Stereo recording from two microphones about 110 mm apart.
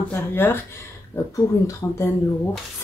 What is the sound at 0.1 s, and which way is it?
Speech, 20° left (ahead or behind).